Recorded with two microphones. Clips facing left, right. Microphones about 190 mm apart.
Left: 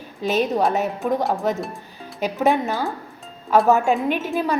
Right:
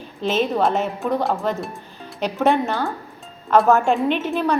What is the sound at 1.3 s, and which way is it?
A woman's voice, 15° left (ahead or behind).